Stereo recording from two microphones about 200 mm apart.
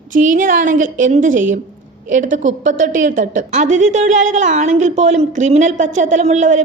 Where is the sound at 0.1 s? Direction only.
40° right (ahead or behind).